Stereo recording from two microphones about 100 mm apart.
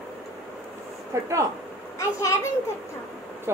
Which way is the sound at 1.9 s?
30° left (ahead or behind).